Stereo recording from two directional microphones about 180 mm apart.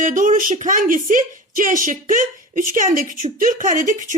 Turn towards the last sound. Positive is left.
turn(degrees=-45)  # may be behind; listen again after turning